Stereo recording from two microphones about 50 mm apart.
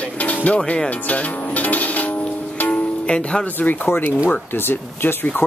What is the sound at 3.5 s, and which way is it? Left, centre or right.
Speech, left.